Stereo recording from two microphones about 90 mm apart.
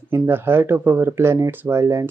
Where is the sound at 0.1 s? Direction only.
25° right (ahead or behind).